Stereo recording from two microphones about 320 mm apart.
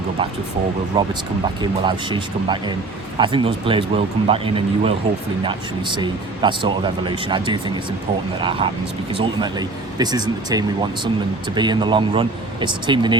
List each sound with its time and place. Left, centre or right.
1.6 s speech: centre